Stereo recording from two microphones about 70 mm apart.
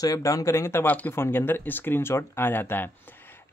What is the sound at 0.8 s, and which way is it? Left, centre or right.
Speech, left.